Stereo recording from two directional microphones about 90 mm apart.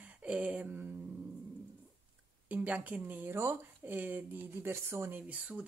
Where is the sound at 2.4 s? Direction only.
15° right (ahead or behind).